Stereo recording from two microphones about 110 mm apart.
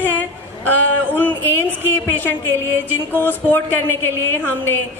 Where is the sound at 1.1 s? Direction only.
20° left (ahead or behind).